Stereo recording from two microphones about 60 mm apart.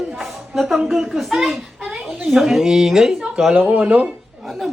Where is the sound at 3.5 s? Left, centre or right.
Right.